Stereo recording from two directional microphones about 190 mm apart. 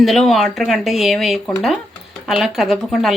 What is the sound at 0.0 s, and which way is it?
Speech, centre (ahead or behind).